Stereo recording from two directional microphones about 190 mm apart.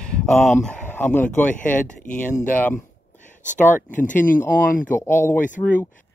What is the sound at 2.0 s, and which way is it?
Speech, 40° left (ahead or behind).